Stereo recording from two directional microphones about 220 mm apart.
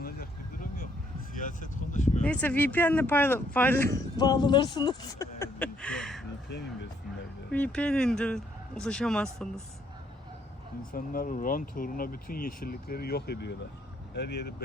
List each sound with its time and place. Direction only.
0.0 s vehicle: 40° left (ahead or behind)
2.2 s speech: 5° left (ahead or behind)
7.5 s speech: 5° left (ahead or behind)
10.9 s speech: 40° left (ahead or behind)